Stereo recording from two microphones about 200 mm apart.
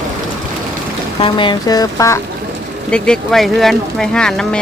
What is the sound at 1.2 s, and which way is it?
Speech, 25° left (ahead or behind).